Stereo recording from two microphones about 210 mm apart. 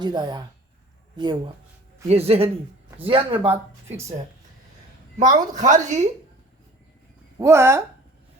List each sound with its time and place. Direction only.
0.0 s speech: 20° right (ahead or behind)
5.1 s a woman's voice: 35° right (ahead or behind)
7.3 s speech: 15° right (ahead or behind)